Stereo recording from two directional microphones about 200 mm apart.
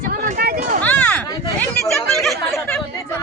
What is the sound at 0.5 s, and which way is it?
Speech, 40° right (ahead or behind).